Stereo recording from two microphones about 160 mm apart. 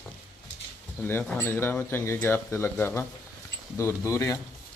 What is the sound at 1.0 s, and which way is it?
Speech, 10° left (ahead or behind).